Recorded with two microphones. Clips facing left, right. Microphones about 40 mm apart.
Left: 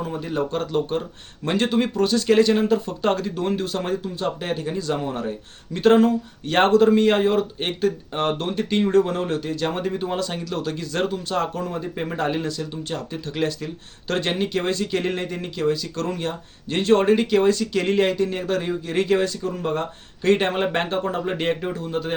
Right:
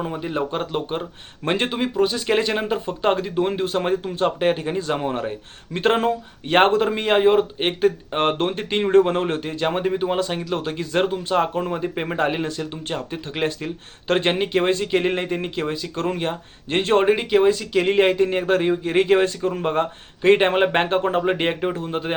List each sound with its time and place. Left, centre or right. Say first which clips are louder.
0.0 s speech: right 1 dB; right
1.8 s speech: even; centre; by 17.1 s right
17.1 s speech: right 1 dB; centre
17.9 s speech: right 4 dB; right